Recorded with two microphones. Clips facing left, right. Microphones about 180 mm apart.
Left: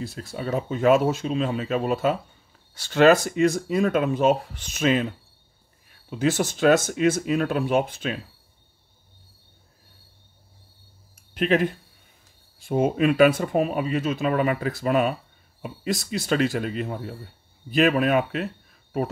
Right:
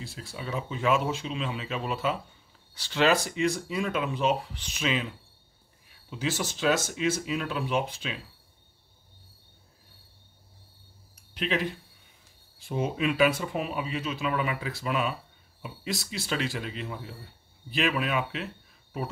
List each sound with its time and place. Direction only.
0.0 s speech: 45° left (ahead or behind)
11.1 s a sound: 50° left (ahead or behind)
12.5 s speech: 50° left (ahead or behind)